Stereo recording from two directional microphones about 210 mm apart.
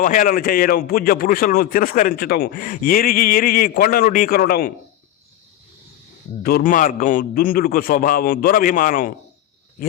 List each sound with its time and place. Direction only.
0.0 s a man's voice: 40° left (ahead or behind)
6.4 s a man's voice: 45° left (ahead or behind)